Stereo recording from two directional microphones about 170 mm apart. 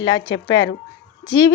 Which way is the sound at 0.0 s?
20° left (ahead or behind).